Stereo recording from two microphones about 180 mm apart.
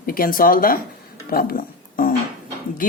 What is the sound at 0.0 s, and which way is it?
Speech, 55° left (ahead or behind).